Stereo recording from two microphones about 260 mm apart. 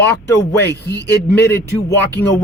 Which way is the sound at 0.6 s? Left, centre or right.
Left.